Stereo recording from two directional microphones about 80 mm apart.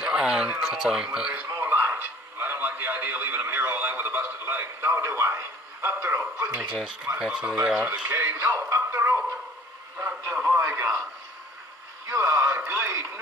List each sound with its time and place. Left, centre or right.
0.0 s a sound: centre
0.6 s speech: centre
1.6 s radio: right
6.3 s speech: centre
8.2 s music: right
10.2 s radio: right
12.1 s speech: right